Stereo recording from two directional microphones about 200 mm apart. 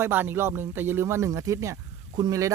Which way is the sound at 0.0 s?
10° right (ahead or behind).